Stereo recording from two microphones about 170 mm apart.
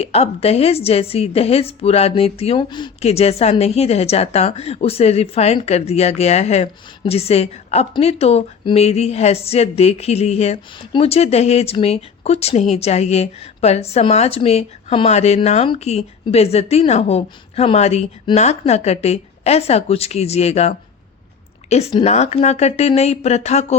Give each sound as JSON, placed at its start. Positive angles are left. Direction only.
{"t": 0.0, "sound": "a woman's voice", "side_deg": 35}